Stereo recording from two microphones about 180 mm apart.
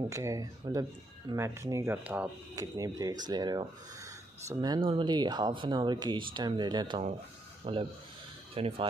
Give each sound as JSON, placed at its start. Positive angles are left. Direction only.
{"t": 0.1, "sound": "speech", "side_deg": -15}
{"t": 2.5, "sound": "speech", "side_deg": -20}